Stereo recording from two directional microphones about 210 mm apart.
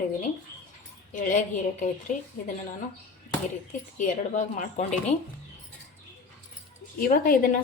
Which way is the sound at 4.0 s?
35° left (ahead or behind).